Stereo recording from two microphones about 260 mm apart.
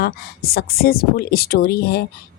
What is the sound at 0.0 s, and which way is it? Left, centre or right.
A woman's voice, left.